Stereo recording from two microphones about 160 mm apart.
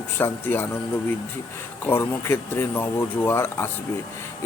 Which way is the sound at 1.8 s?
15° left (ahead or behind).